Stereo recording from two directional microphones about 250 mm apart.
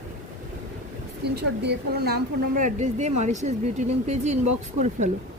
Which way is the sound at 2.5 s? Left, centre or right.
Right.